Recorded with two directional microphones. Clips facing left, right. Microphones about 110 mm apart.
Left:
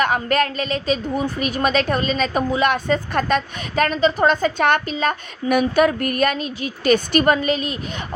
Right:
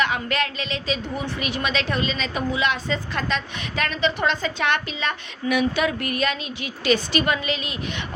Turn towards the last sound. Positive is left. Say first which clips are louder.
# left 6 dB
turn(degrees=40)  # may be behind; listen again after turning